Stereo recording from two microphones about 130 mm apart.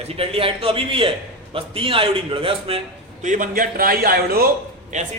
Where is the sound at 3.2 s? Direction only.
80° right.